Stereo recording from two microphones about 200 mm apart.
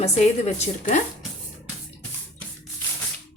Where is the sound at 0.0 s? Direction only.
35° left (ahead or behind).